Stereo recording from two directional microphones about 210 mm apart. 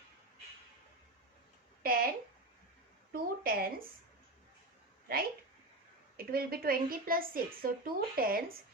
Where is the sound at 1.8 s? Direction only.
45° right (ahead or behind).